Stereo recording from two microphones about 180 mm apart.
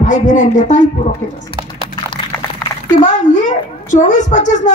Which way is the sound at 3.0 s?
45° left (ahead or behind).